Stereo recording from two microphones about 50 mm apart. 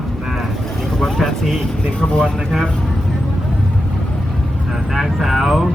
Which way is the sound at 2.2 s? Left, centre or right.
Centre.